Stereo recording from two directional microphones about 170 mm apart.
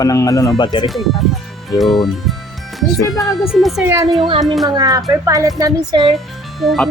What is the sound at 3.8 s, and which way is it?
Speech, 15° right (ahead or behind).